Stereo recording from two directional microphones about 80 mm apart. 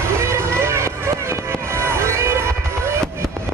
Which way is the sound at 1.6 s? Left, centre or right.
Right.